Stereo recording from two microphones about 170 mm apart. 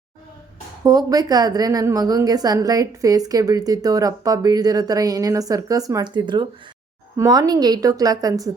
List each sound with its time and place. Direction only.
0.9 s a woman's voice: 20° right (ahead or behind)